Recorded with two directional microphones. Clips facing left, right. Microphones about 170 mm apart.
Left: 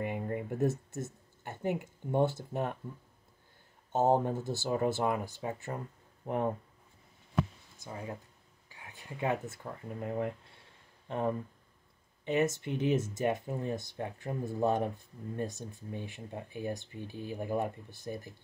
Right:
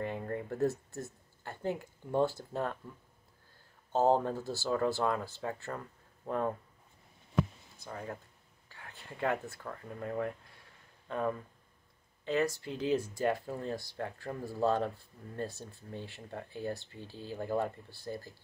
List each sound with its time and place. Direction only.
0.0 s speech: 15° left (ahead or behind)
3.9 s speech: 20° left (ahead or behind)
7.8 s speech: 15° left (ahead or behind)
8.6 s a sound: 15° left (ahead or behind)
12.3 s speech: 20° left (ahead or behind)